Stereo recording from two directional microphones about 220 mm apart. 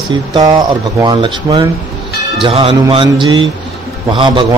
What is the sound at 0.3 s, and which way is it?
Speech, 20° right (ahead or behind).